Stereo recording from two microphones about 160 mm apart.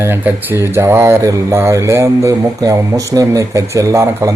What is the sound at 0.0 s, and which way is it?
Speech, 15° right (ahead or behind).